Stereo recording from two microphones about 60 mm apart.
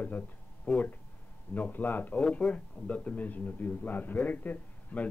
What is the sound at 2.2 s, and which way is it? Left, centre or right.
A man's voice, centre.